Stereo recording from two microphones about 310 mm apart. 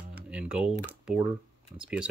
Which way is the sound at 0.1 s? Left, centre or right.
Centre.